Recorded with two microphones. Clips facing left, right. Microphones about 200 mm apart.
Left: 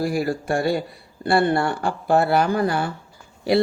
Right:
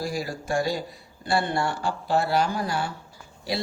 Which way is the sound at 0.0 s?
60° left (ahead or behind).